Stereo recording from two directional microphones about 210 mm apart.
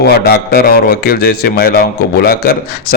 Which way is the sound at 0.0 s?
45° left (ahead or behind).